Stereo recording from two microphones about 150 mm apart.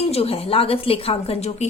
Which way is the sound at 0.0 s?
40° left (ahead or behind).